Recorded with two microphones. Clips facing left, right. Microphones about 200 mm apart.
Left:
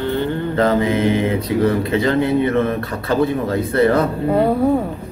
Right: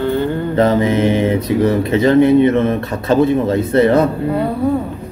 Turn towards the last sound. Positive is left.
turn(degrees=-20)  # may be behind; listen again after turning